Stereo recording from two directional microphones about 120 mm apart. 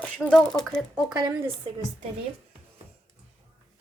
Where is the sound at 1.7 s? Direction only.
45° right (ahead or behind).